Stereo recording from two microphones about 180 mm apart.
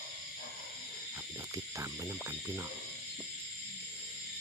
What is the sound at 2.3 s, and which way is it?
Speech, 15° right (ahead or behind).